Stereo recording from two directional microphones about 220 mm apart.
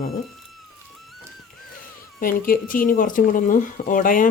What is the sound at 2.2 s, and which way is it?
Speech, 40° left (ahead or behind).